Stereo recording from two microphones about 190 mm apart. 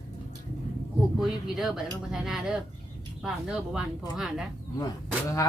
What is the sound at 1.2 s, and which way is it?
Speech, centre (ahead or behind).